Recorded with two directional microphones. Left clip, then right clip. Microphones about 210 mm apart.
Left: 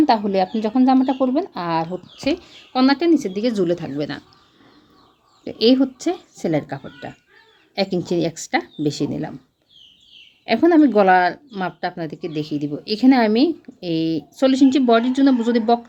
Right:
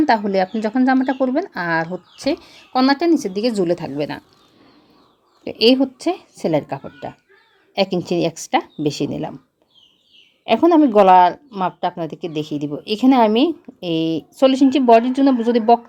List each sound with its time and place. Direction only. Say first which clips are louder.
0.0 s a woman's voice: right 1 dB; 15° right (ahead or behind)
5.5 s a woman's voice: right 2 dB; 10° right (ahead or behind)
10.4 s a woman's voice: right 1 dB; 10° right (ahead or behind)
13.2 s a woman's voice: right 2 dB; 25° left (ahead or behind)
14.3 s a woman's voice: right 2 dB; 10° right (ahead or behind)